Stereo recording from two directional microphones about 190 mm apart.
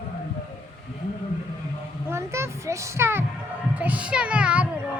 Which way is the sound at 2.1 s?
15° right (ahead or behind).